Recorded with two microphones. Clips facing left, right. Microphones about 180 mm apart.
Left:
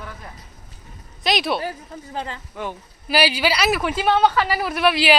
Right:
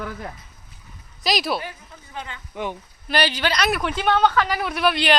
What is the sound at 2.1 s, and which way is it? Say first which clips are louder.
Speech: left 5 dB; 35° left (ahead or behind).